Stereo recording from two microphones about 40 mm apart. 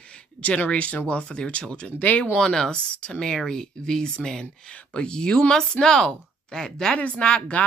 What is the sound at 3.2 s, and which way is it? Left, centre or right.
Speech, centre.